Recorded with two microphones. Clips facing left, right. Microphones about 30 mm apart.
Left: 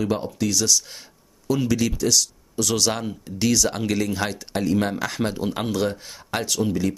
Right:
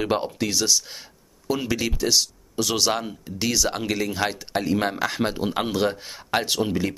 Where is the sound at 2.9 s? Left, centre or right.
Centre.